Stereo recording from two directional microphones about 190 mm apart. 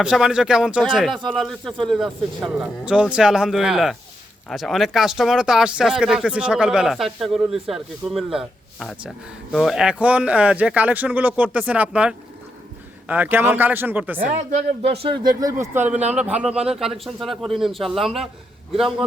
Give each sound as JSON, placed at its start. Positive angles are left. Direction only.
{"t": 0.0, "sound": "speech", "side_deg": -5}
{"t": 14.2, "sound": "speech", "side_deg": -40}
{"t": 15.6, "sound": "speech", "side_deg": -10}